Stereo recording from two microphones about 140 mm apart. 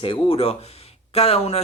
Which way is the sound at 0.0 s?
40° left (ahead or behind).